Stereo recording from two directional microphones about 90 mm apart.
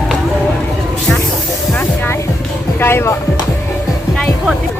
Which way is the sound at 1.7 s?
20° left (ahead or behind).